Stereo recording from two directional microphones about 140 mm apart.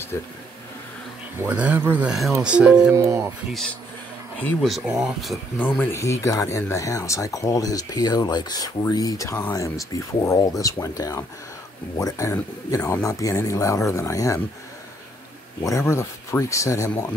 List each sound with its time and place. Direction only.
0.1 s speech: 20° left (ahead or behind)
1.4 s speech: 10° right (ahead or behind)
3.0 s speech: 20° right (ahead or behind)
4.6 s speech: centre (ahead or behind)
5.6 s speech: 15° left (ahead or behind)
15.6 s speech: 20° left (ahead or behind)